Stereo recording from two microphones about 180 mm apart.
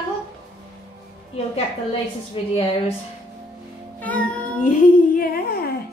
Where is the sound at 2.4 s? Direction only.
30° left (ahead or behind).